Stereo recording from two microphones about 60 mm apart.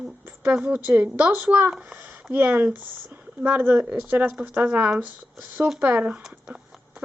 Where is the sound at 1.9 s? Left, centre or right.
Right.